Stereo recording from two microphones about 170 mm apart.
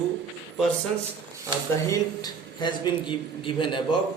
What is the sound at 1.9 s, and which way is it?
A man's voice, 25° left (ahead or behind).